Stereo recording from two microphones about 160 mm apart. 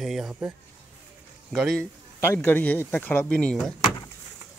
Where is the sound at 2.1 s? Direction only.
15° left (ahead or behind).